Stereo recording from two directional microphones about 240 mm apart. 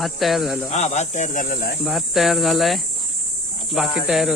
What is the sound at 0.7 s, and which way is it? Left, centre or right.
Speech, left.